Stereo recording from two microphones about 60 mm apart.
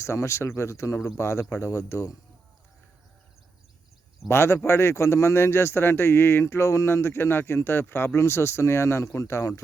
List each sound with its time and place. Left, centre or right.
0.0 s speech: left
4.3 s speech: left